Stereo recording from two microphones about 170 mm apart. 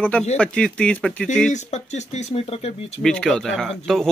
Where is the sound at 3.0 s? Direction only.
Centre (ahead or behind).